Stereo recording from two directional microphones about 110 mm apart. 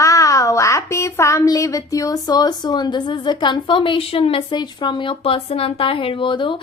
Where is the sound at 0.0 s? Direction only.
30° left (ahead or behind).